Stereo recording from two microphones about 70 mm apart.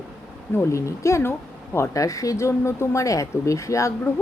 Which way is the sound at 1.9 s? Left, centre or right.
Left.